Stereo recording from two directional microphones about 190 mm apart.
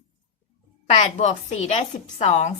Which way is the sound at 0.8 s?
40° left (ahead or behind).